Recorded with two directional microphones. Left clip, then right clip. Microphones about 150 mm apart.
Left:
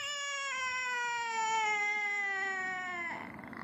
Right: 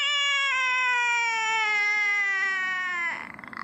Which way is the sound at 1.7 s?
15° left (ahead or behind).